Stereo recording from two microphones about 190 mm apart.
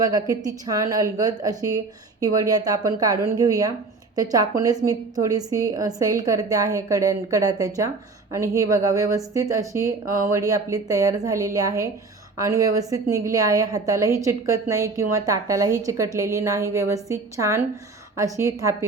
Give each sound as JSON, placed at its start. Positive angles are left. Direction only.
{"t": 0.0, "sound": "a woman's voice", "side_deg": -20}